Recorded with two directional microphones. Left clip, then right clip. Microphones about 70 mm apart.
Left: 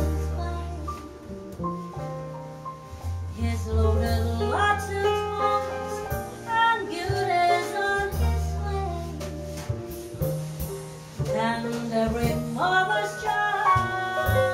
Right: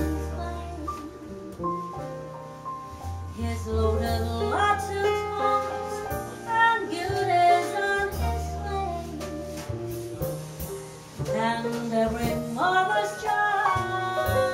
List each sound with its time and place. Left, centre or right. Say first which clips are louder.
3.4 s music: right 1 dB; centre
11.2 s music: even; centre